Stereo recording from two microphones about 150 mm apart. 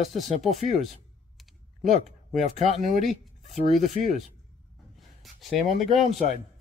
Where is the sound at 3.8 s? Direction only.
55° right (ahead or behind).